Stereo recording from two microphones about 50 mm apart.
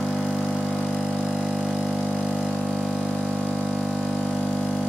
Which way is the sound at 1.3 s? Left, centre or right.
Centre.